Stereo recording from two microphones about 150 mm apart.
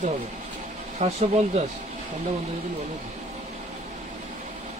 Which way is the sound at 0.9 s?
45° right (ahead or behind).